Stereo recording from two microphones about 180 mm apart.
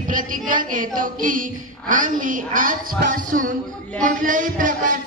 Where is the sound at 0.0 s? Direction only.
50° right (ahead or behind).